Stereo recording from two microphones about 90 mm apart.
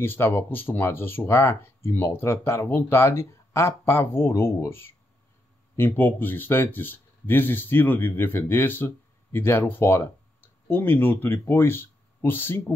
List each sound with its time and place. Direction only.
0.0 s speech: 25° left (ahead or behind)